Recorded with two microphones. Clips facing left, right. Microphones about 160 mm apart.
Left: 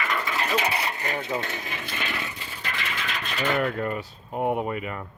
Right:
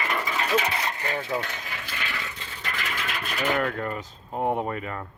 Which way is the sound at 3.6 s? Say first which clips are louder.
Left 2 dB; 20° left (ahead or behind).